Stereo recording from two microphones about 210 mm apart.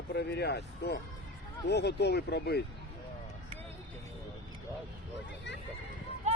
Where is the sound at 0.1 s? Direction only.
50° left (ahead or behind).